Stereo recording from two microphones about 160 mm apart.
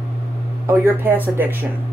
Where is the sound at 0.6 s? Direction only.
15° right (ahead or behind).